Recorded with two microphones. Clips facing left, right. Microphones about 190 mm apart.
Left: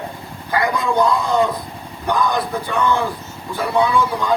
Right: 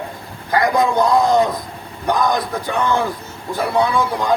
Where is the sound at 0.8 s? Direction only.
40° right (ahead or behind).